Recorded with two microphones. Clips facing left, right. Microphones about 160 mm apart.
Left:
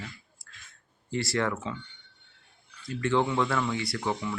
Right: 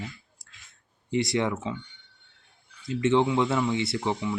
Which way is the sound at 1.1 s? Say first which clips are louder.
Right 3 dB; 20° right (ahead or behind).